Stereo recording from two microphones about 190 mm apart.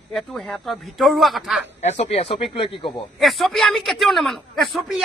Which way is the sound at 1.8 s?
35° left (ahead or behind).